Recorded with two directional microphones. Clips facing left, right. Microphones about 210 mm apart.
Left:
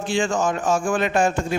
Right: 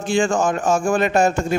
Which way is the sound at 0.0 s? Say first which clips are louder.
Right 3 dB; 45° right (ahead or behind).